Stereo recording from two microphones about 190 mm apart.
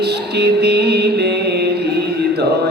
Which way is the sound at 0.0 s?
60° right (ahead or behind).